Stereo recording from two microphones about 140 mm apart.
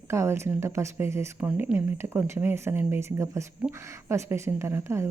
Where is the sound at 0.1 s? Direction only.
20° right (ahead or behind).